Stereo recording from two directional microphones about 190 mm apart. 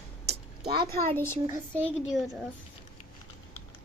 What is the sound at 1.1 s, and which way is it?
Speech, 10° left (ahead or behind).